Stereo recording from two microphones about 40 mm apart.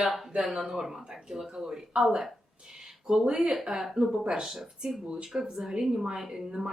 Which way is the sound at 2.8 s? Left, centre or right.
Centre.